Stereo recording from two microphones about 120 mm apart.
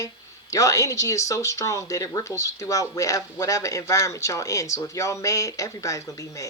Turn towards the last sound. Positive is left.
turn(degrees=25)  # may be behind; listen again after turning